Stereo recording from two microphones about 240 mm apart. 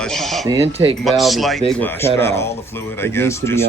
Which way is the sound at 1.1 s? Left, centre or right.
Centre.